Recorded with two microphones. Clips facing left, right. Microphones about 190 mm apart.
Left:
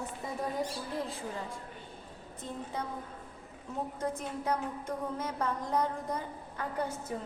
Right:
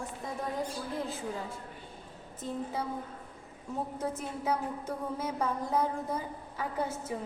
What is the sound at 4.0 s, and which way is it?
A woman's voice, 5° right (ahead or behind).